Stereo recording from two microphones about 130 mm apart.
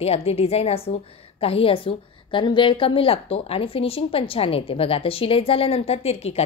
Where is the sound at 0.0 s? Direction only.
50° left (ahead or behind).